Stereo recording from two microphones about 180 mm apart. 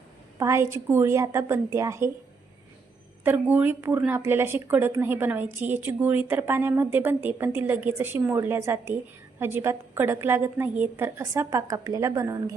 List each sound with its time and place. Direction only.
0.3 s a woman's voice: 15° right (ahead or behind)
3.2 s a woman's voice: 10° right (ahead or behind)